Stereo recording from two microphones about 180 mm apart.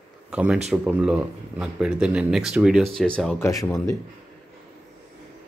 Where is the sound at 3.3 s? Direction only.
15° left (ahead or behind).